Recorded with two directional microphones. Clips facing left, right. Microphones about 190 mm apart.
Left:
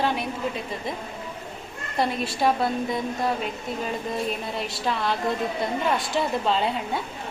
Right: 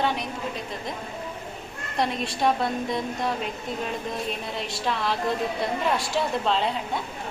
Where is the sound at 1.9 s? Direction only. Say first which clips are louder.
Left 1 dB; centre (ahead or behind).